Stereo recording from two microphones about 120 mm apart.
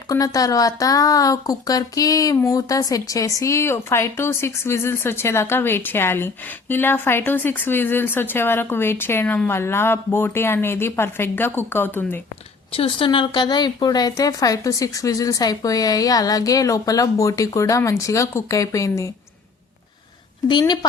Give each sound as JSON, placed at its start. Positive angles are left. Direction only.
{"t": 0.1, "sound": "speech", "side_deg": 30}
{"t": 12.7, "sound": "speech", "side_deg": 50}
{"t": 20.5, "sound": "a woman's voice", "side_deg": 35}